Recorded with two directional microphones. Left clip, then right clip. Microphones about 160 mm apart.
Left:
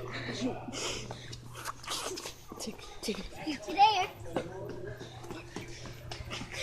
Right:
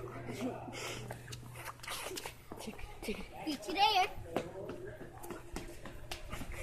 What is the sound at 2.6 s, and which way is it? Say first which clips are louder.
Whispering: left 5 dB; 60° left (ahead or behind).